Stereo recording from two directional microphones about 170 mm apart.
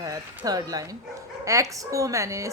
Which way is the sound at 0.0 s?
20° right (ahead or behind).